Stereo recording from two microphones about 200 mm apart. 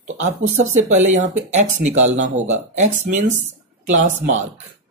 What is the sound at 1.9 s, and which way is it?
Speech, 75° right (ahead or behind).